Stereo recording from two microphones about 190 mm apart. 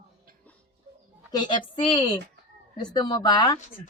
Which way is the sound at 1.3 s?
25° left (ahead or behind).